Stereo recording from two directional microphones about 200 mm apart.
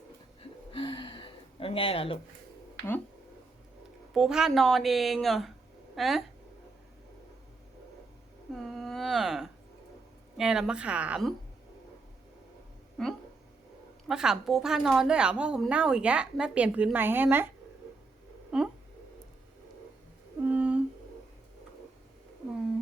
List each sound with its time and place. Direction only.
0.7 s gasp: 25° left (ahead or behind)
4.1 s a woman's voice: 5° right (ahead or behind)
8.5 s a sound: centre (ahead or behind)
10.3 s a woman's voice: 5° right (ahead or behind)
13.0 s a woman's voice: centre (ahead or behind)
18.5 s a woman's voice: 5° right (ahead or behind)
20.4 s humming: 10° right (ahead or behind)